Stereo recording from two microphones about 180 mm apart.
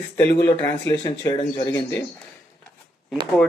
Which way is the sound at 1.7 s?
10° left (ahead or behind).